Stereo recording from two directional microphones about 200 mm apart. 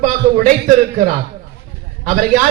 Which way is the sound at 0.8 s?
40° right (ahead or behind).